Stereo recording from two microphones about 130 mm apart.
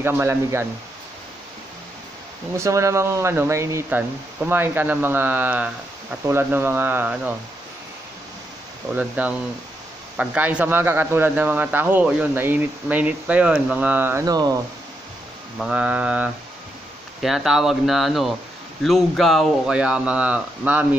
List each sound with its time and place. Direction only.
0.0 s speech: 20° right (ahead or behind)
2.5 s a man's voice: 20° right (ahead or behind)
8.9 s a man's voice: 10° right (ahead or behind)
14.2 s speech: 30° right (ahead or behind)
15.6 s a man's voice: 10° right (ahead or behind)